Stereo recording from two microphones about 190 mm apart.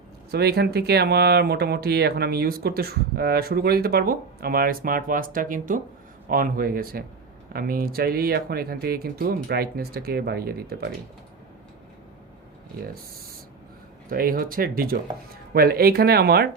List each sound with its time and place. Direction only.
0.3 s speech: 60° right (ahead or behind)
14.1 s speech: 50° right (ahead or behind)